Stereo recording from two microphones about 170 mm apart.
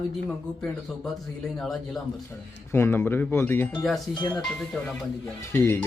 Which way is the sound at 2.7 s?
15° left (ahead or behind).